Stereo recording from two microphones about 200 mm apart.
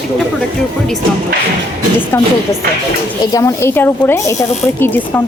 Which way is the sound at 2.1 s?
10° left (ahead or behind).